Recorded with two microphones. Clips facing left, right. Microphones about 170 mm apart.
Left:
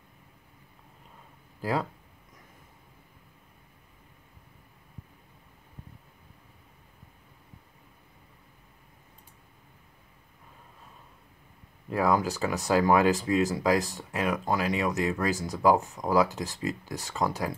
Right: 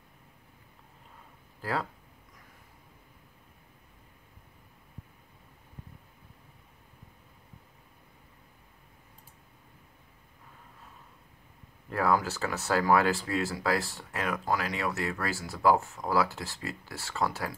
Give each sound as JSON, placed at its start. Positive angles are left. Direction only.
{"t": 1.6, "sound": "speech", "side_deg": 15}
{"t": 11.9, "sound": "speech", "side_deg": 15}